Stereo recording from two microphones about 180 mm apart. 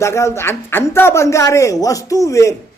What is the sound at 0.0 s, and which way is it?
A man's voice, 15° left (ahead or behind).